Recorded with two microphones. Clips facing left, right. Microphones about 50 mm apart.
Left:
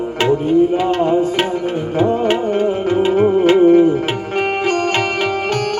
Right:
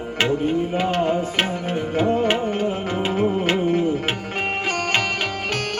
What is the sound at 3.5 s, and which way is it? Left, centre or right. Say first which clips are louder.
Music: left 11 dB; left.